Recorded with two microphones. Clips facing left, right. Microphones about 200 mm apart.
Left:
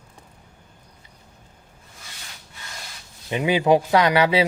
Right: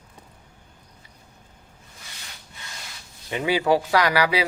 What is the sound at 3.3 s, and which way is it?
Speech, 20° left (ahead or behind).